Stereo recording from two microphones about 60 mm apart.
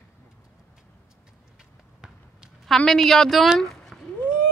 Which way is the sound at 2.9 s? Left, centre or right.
Centre.